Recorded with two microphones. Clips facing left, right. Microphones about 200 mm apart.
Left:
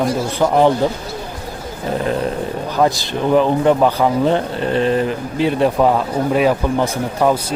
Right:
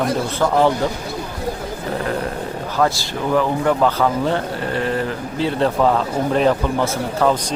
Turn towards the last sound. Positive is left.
turn(degrees=15)  # may be behind; listen again after turning